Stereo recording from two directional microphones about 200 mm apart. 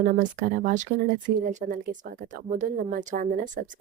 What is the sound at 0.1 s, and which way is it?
A woman's voice, 40° right (ahead or behind).